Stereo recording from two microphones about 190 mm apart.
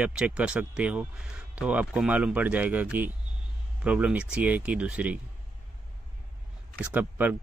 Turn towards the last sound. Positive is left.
turn(degrees=-10)  # may be behind; listen again after turning